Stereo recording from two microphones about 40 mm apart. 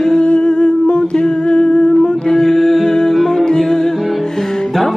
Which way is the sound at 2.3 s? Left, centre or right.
Centre.